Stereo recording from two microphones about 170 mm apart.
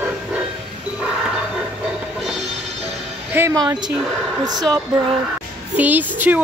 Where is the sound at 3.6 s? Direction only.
25° right (ahead or behind).